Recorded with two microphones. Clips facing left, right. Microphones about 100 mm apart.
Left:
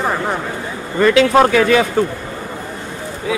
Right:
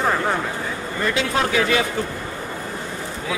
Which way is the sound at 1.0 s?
75° left (ahead or behind).